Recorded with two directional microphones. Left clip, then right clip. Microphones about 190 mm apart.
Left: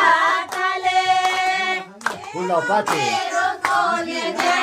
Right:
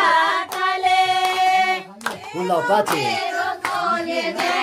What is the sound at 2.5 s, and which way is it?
Speech, 15° right (ahead or behind).